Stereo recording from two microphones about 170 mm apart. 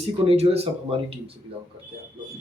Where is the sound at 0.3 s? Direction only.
35° right (ahead or behind).